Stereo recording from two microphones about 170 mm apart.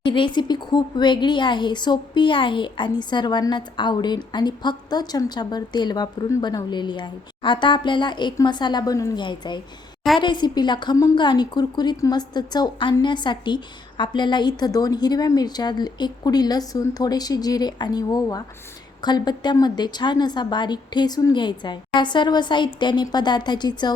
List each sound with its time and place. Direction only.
0.0 s speech: 30° left (ahead or behind)